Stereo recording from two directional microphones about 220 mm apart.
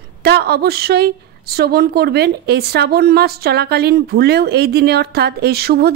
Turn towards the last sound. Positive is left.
turn(degrees=-45)  # may be behind; listen again after turning